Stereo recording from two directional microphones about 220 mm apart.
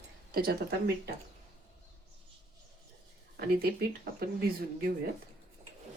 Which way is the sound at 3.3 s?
45° right (ahead or behind).